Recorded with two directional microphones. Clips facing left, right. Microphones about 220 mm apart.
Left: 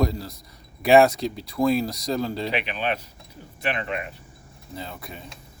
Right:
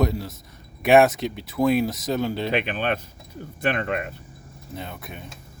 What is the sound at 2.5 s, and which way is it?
Speech, 50° right (ahead or behind).